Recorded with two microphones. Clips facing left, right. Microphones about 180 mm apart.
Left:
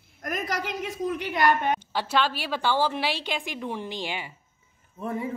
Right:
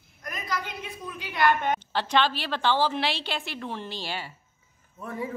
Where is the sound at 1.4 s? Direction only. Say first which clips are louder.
Even; 10° left (ahead or behind).